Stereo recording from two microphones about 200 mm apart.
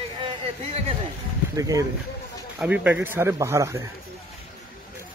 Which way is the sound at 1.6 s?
15° right (ahead or behind).